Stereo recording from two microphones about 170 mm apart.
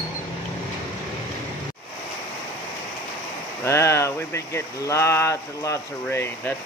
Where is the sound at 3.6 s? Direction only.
15° left (ahead or behind).